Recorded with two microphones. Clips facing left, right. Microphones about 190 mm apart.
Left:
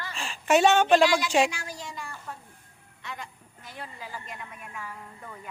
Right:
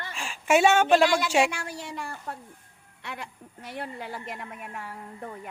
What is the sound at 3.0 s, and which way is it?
A woman's voice, 65° right (ahead or behind).